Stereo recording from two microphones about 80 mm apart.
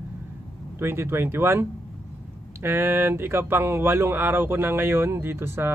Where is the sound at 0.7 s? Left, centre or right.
Right.